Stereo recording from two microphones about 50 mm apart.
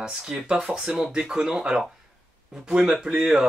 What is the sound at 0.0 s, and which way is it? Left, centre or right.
Speech, centre.